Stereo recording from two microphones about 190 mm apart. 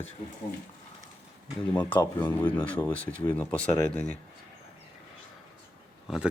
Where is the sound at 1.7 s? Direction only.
10° left (ahead or behind).